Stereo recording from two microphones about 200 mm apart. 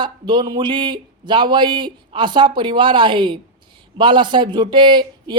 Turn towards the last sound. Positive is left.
turn(degrees=-25)  # may be behind; listen again after turning